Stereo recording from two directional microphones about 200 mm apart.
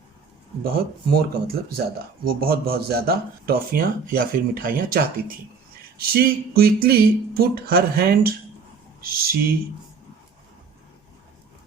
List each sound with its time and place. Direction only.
0.6 s speech: 50° right (ahead or behind)